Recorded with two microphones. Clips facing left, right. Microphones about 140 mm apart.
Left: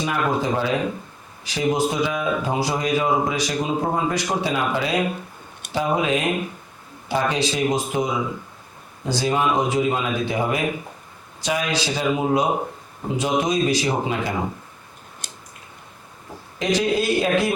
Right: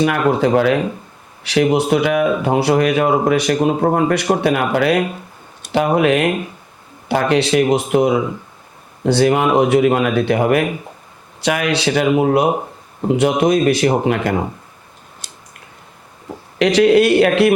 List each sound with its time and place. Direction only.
0.0 s speech: 65° right (ahead or behind)
16.6 s speech: 75° right (ahead or behind)